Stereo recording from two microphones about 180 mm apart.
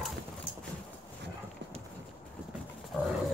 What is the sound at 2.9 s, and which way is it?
Dog, centre (ahead or behind).